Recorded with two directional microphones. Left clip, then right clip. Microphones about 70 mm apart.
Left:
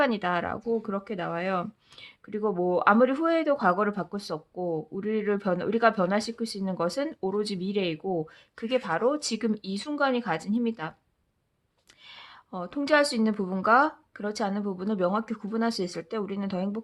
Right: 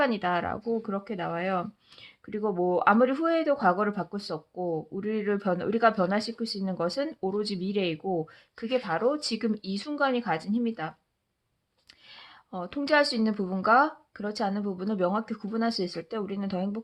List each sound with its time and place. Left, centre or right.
0.0 s speech: left
12.0 s speech: left